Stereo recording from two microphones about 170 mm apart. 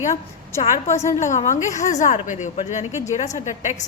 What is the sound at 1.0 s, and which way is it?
A woman's voice, 45° left (ahead or behind).